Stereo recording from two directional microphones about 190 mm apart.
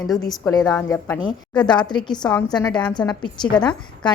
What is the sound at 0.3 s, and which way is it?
A woman's voice, 20° left (ahead or behind).